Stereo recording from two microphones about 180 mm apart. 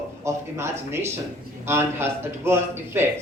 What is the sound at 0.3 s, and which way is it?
A man's voice, 15° right (ahead or behind).